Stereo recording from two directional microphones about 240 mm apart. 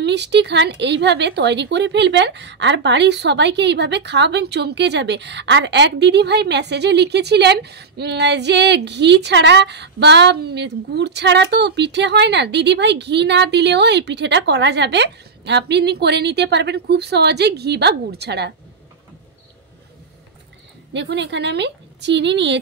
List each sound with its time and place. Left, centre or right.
0.0 s speech: right
20.9 s speech: right